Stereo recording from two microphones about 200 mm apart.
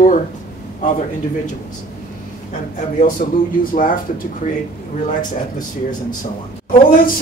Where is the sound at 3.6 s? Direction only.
45° left (ahead or behind).